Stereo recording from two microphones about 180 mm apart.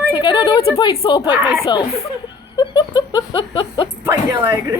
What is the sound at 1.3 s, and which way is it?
Speech, 15° right (ahead or behind).